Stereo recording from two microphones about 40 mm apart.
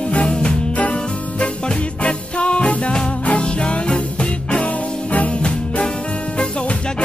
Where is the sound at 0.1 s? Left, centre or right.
Left.